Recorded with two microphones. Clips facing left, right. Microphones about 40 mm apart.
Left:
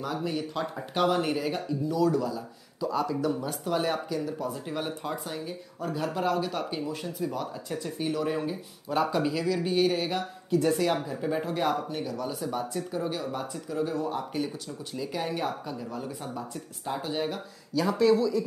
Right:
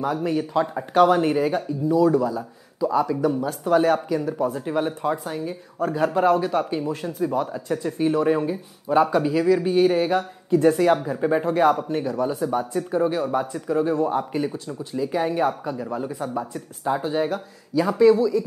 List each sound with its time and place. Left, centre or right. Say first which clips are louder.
0.1 s speech: right 8 dB; right
2.8 s speech: right 7 dB; right
4.4 s speech: right 9 dB; right
8.3 s speech: right 8 dB; centre; by 13.7 s right
13.7 s speech: right 8 dB; right
15.0 s speech: right 9 dB; right
16.8 s speech: right 8 dB; right
18.1 s speech: right 4 dB; centre